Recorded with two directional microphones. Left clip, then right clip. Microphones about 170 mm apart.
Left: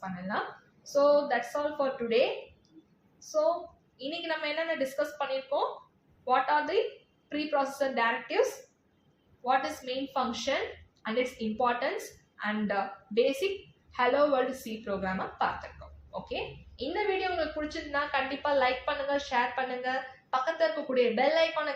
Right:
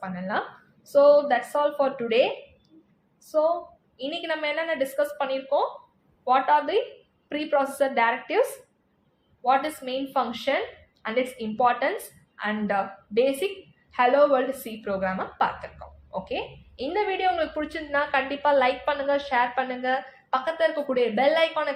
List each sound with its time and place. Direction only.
0.9 s speech: 45° right (ahead or behind)
3.9 s a woman's voice: 40° right (ahead or behind)
9.4 s a woman's voice: 40° right (ahead or behind)